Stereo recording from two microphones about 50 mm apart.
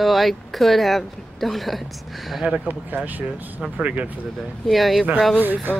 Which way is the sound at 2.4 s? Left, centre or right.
Right.